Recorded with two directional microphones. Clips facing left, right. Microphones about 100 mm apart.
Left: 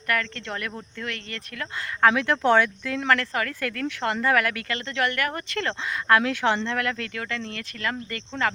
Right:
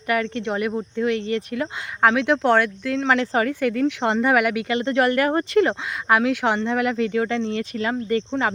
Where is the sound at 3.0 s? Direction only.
20° right (ahead or behind).